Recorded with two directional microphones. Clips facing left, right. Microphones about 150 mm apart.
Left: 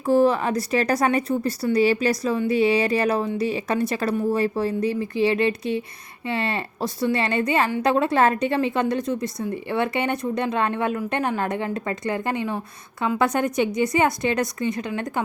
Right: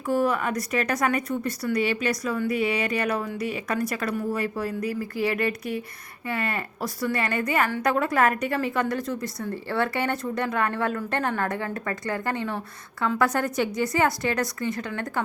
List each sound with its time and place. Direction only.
0.0 s a woman's voice: 30° left (ahead or behind)